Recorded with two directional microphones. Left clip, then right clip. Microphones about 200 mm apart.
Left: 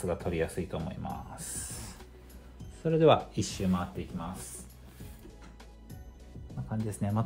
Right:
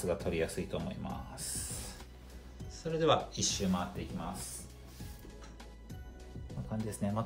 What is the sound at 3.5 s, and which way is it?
Speech, 40° left (ahead or behind).